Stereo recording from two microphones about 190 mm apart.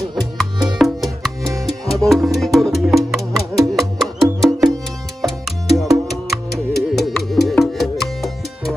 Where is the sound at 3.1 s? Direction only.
15° right (ahead or behind).